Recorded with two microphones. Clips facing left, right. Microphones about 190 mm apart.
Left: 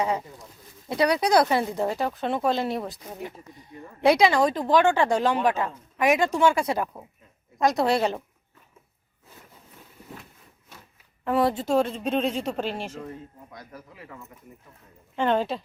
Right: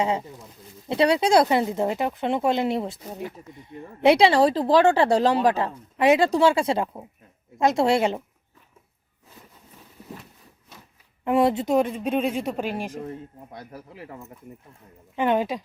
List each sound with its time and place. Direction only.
0.0 s speech: 25° right (ahead or behind)
11.3 s speech: 20° right (ahead or behind)
13.5 s speech: 30° right (ahead or behind)
15.1 s speech: 15° right (ahead or behind)